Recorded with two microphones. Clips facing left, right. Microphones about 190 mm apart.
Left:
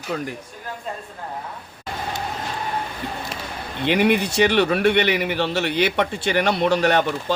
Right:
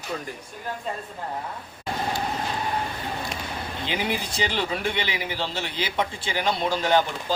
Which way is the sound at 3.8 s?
70° left (ahead or behind).